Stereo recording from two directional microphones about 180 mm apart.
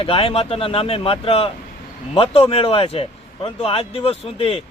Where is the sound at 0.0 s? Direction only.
30° left (ahead or behind).